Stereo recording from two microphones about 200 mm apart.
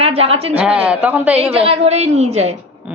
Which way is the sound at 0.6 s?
5° right (ahead or behind).